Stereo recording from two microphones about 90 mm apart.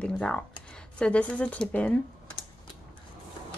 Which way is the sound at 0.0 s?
10° left (ahead or behind).